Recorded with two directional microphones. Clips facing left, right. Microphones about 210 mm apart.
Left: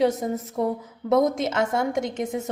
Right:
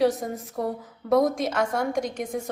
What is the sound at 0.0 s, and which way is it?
A woman's voice, 20° left (ahead or behind).